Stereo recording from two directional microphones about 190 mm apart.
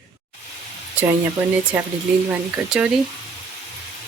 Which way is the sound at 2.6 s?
Centre (ahead or behind).